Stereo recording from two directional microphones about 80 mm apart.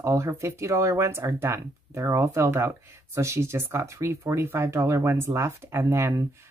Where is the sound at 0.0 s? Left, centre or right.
Right.